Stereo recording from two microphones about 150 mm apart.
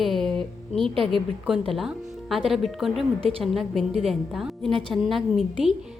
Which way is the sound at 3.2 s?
40° right (ahead or behind).